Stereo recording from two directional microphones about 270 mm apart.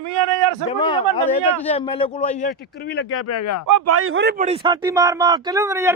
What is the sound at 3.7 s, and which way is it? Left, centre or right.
Speech, right.